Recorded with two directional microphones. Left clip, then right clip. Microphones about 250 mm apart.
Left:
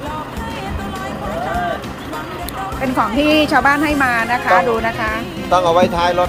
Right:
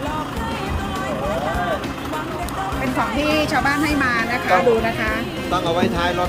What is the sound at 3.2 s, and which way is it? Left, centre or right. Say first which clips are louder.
A woman's voice: left 7 dB; centre.